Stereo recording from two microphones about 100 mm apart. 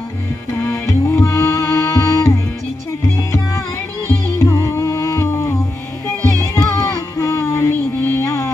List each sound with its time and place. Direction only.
0.7 s music: 30° left (ahead or behind)
4.1 s music: 30° left (ahead or behind)
6.5 s music: 30° left (ahead or behind)